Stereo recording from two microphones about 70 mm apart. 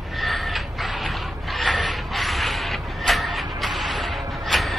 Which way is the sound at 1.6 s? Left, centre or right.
Centre.